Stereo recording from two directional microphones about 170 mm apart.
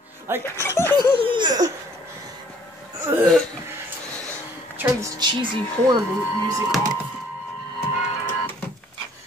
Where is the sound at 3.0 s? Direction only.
20° right (ahead or behind).